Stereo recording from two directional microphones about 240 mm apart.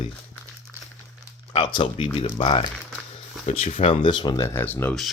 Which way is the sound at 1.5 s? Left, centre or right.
Left.